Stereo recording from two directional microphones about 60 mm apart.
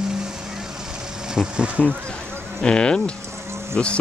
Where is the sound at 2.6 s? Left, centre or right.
Centre.